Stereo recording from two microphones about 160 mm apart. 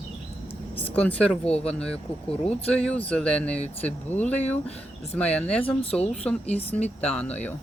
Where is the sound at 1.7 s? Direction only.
5° left (ahead or behind).